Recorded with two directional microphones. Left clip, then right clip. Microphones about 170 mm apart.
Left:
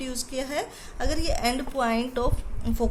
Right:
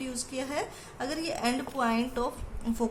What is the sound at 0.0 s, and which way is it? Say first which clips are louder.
A woman's voice: left 4 dB; 30° left (ahead or behind).